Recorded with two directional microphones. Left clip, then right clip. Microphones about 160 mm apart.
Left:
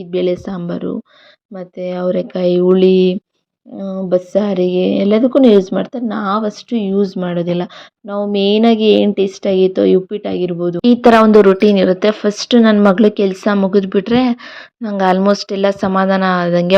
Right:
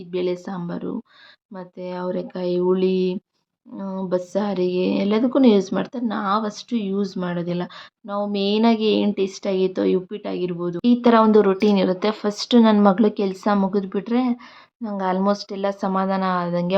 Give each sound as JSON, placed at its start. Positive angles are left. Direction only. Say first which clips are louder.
{"t": 0.1, "sound": "speech", "louder": "left 8 dB", "side_deg": 25}
{"t": 3.8, "sound": "speech", "louder": "left 8 dB", "side_deg": 20}
{"t": 10.8, "sound": "speech", "louder": "left 7 dB", "side_deg": 45}
{"t": 11.3, "sound": "speech", "louder": "left 8 dB", "side_deg": 25}